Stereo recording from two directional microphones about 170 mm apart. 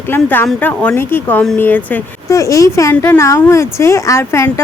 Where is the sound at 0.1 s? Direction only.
10° left (ahead or behind).